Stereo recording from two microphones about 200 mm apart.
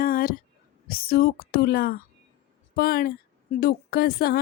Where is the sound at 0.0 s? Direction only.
45° left (ahead or behind).